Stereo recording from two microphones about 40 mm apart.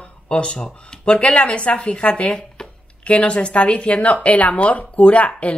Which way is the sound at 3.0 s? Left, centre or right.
Left.